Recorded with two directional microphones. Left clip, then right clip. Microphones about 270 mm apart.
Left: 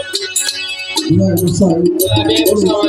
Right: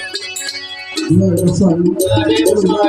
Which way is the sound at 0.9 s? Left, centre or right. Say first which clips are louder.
Even; left.